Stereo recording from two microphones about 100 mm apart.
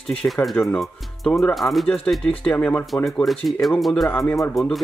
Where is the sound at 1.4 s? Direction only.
Centre (ahead or behind).